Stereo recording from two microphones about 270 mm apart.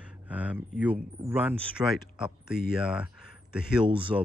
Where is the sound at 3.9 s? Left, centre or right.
Centre.